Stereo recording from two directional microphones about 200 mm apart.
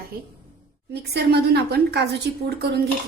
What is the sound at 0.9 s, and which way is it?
A woman's voice, 55° right (ahead or behind).